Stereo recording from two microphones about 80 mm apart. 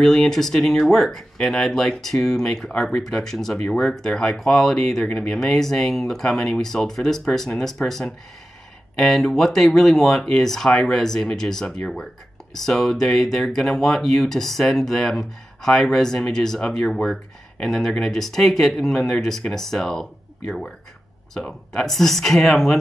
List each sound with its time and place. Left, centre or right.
0.0 s speech: centre